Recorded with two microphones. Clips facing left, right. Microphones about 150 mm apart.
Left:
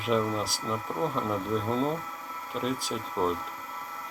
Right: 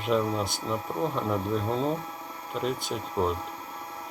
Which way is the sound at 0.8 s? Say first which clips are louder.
Even; 20° right (ahead or behind).